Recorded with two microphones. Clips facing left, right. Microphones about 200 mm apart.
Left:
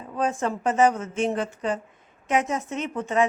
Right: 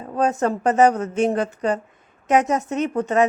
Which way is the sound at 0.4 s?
40° right (ahead or behind).